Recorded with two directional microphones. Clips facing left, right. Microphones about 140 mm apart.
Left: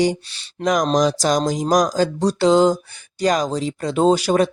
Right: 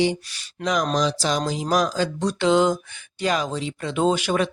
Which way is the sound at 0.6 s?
45° left (ahead or behind).